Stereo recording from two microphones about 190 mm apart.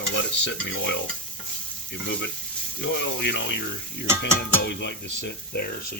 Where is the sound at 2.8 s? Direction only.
65° left (ahead or behind).